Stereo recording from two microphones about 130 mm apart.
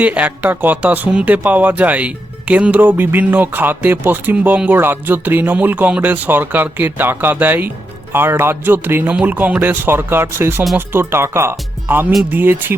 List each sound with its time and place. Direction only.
0.0 s speech: 10° right (ahead or behind)